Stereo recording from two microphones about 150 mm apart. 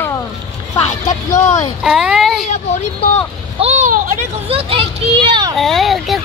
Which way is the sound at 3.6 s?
50° right (ahead or behind).